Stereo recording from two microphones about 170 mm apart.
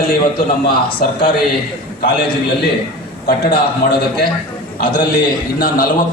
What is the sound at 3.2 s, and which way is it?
Speech, 60° left (ahead or behind).